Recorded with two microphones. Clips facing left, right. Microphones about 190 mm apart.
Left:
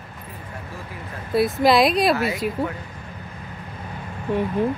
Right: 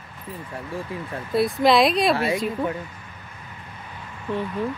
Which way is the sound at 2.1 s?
25° right (ahead or behind).